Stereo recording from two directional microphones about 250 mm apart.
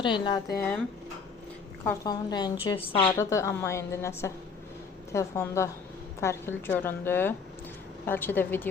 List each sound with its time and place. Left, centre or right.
0.0 s a woman's voice: centre
1.8 s a woman's voice: centre